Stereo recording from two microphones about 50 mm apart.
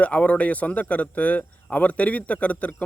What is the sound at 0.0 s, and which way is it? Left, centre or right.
Speech, left.